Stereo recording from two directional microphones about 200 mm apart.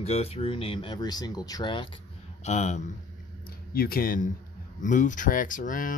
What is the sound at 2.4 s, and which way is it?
Speech, 35° left (ahead or behind).